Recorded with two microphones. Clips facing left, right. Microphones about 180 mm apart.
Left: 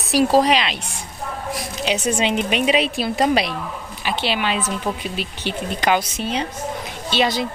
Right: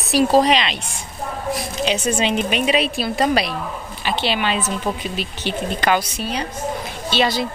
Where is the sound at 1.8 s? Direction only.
15° left (ahead or behind).